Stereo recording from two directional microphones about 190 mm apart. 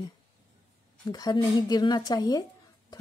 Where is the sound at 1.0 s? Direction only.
20° left (ahead or behind).